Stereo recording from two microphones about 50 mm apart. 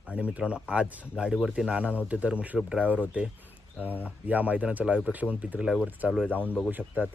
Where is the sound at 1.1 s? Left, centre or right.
Centre.